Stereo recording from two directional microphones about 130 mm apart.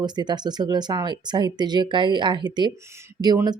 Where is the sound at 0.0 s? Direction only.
35° right (ahead or behind).